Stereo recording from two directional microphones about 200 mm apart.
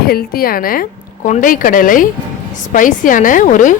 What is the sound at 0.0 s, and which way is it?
Speech, 50° left (ahead or behind).